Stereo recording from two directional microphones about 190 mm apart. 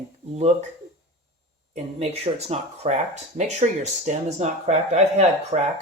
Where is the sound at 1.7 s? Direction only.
30° right (ahead or behind).